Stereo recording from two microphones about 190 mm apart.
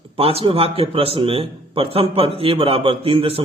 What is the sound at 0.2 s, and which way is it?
A man's voice, 30° right (ahead or behind).